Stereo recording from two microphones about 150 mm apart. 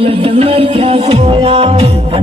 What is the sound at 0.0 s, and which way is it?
Music, 40° right (ahead or behind).